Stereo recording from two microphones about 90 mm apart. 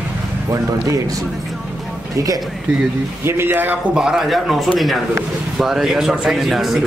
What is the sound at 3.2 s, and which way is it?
Speech, 25° right (ahead or behind).